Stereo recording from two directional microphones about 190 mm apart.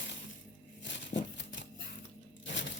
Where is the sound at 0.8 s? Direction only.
75° left (ahead or behind).